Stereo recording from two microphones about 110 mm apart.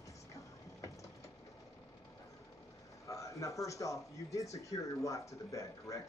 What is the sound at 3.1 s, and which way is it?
Speech, 30° left (ahead or behind).